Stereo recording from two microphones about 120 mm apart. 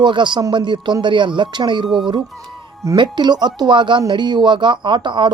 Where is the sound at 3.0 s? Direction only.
40° right (ahead or behind).